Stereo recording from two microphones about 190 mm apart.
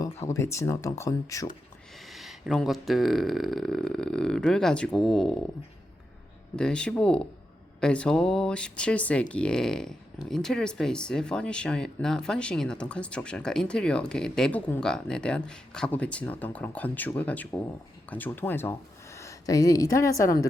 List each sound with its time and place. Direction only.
0.0 s speech: 15° left (ahead or behind)
2.0 s speech: centre (ahead or behind)
6.6 s speech: 5° left (ahead or behind)